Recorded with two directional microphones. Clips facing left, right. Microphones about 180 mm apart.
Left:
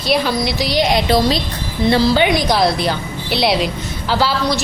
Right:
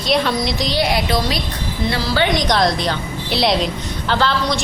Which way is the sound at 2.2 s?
5° left (ahead or behind).